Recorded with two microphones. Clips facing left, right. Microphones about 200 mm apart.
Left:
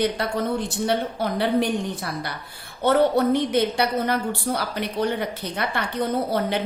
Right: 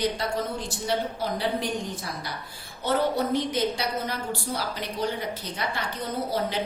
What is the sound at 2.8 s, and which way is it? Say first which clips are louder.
A woman's voice: left 6 dB; 60° left (ahead or behind).